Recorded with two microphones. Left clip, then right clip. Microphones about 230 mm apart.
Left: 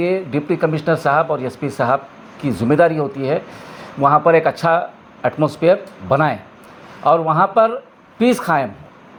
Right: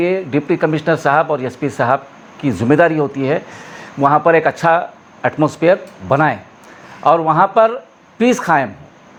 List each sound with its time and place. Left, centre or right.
0.0 s speech: right